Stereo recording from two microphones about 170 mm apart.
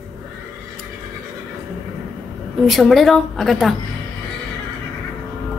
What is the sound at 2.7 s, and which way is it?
A woman's voice, centre (ahead or behind).